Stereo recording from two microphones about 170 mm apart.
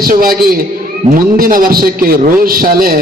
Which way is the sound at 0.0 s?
60° right (ahead or behind).